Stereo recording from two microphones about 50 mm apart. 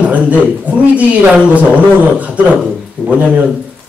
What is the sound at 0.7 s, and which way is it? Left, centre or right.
A man's voice, right.